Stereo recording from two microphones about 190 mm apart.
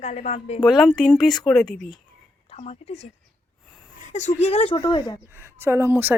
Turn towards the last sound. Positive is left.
turn(degrees=-10)  # may be behind; listen again after turning